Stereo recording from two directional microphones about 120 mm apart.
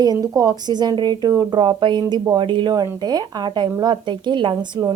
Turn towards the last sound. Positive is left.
turn(degrees=-35)  # may be behind; listen again after turning